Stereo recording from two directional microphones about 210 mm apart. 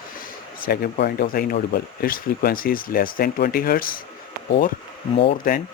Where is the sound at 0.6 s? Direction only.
45° left (ahead or behind).